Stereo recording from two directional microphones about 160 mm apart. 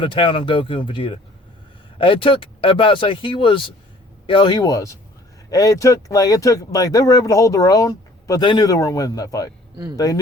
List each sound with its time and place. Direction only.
0.0 s speech: 30° left (ahead or behind)
9.7 s speech: 20° right (ahead or behind)